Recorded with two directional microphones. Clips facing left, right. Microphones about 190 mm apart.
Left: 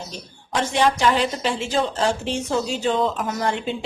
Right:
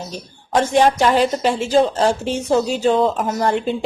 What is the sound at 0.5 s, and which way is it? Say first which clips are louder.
A woman's voice: right 5 dB; 45° right (ahead or behind).